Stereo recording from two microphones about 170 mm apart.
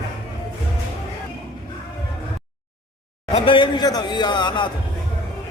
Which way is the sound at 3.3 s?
30° left (ahead or behind).